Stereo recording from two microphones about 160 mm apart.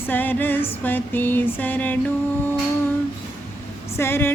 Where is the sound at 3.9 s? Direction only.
15° left (ahead or behind).